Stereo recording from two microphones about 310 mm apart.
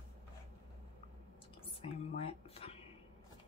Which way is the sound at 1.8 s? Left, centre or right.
Centre.